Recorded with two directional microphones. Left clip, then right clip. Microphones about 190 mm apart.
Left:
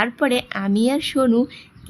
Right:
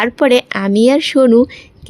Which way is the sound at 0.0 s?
30° right (ahead or behind).